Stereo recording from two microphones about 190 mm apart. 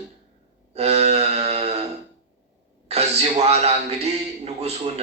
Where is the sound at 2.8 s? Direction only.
35° right (ahead or behind).